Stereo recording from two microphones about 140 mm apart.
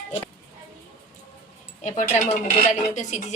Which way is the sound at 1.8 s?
60° left (ahead or behind).